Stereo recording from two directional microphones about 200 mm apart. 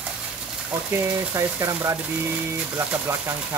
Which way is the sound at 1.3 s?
15° right (ahead or behind).